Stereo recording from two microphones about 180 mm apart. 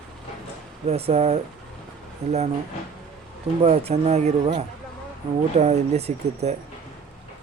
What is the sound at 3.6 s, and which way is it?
Speech, 35° right (ahead or behind).